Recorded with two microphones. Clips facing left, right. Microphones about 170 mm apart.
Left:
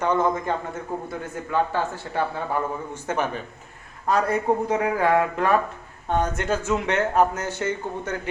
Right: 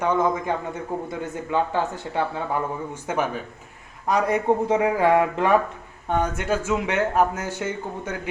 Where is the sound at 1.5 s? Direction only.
15° right (ahead or behind).